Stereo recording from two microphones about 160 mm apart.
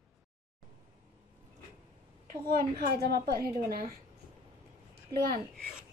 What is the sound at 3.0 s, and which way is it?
Speech, 75° right (ahead or behind).